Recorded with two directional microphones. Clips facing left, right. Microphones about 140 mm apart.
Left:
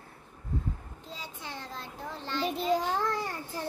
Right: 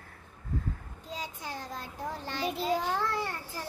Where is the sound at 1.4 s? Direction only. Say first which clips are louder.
Right 2 dB; 40° right (ahead or behind).